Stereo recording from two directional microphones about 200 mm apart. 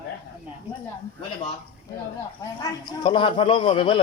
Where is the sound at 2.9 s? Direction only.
25° left (ahead or behind).